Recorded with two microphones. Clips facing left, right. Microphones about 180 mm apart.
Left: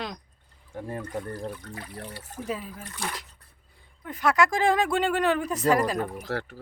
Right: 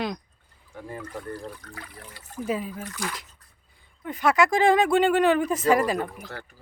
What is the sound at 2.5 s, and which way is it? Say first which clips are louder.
Speech: right 5 dB; centre (ahead or behind).